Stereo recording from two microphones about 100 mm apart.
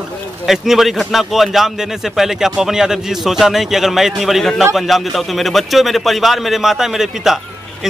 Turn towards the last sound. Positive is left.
turn(degrees=-5)  # may be behind; listen again after turning